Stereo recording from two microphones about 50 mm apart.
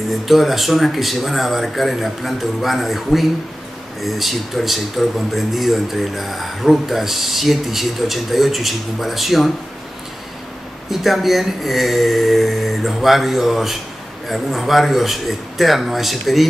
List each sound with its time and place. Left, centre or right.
0.3 s speech: centre
10.9 s speech: centre